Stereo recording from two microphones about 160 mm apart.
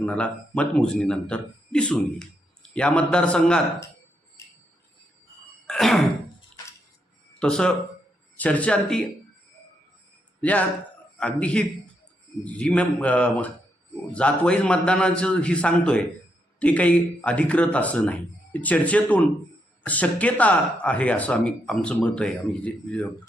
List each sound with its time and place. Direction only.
0.0 s speech: 5° left (ahead or behind)
4.4 s a sound: 20° left (ahead or behind)
5.6 s cough: centre (ahead or behind)
7.3 s speech: 5° left (ahead or behind)
11.2 s speech: 10° left (ahead or behind)